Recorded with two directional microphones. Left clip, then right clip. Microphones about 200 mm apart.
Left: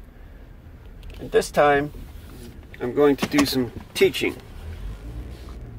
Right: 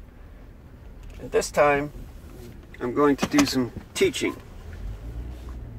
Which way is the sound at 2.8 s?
10° left (ahead or behind).